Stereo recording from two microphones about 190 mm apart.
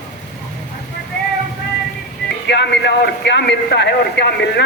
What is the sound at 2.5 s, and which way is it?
A man's voice, 65° left (ahead or behind).